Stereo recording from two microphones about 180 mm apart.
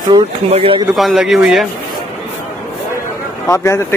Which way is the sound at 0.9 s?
Centre (ahead or behind).